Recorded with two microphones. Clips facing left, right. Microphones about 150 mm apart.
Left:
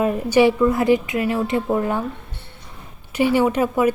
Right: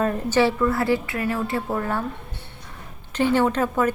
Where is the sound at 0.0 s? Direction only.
10° left (ahead or behind).